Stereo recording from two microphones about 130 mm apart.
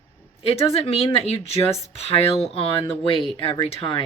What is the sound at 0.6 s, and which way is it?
A woman's voice, 50° left (ahead or behind).